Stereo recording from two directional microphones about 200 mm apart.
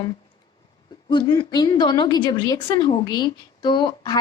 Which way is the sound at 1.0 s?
25° left (ahead or behind).